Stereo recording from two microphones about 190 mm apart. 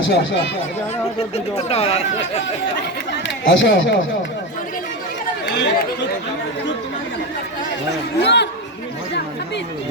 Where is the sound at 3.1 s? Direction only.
70° left (ahead or behind).